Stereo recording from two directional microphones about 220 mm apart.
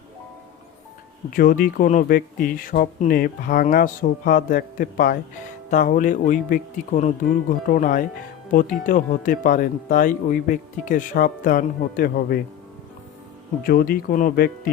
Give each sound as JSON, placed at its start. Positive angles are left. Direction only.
{"t": 1.4, "sound": "speech", "side_deg": 40}
{"t": 13.7, "sound": "speech", "side_deg": 45}